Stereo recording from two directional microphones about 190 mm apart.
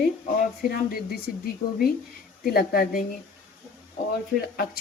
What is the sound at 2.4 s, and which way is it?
Speech, 55° left (ahead or behind).